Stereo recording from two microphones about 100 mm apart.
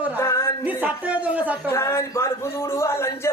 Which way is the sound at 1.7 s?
30° left (ahead or behind).